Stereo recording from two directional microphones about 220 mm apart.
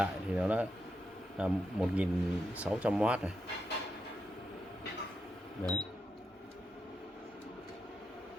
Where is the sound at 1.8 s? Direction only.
5° right (ahead or behind).